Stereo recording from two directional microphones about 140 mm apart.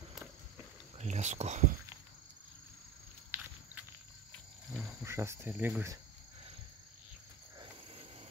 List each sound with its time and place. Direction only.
0.9 s speech: 55° right (ahead or behind)
3.3 s walk: 15° right (ahead or behind)
5.0 s speech: 20° right (ahead or behind)